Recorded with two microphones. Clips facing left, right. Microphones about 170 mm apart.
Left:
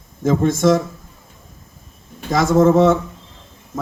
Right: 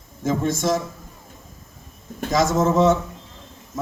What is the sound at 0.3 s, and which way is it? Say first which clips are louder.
Speech: left 6 dB; 50° left (ahead or behind).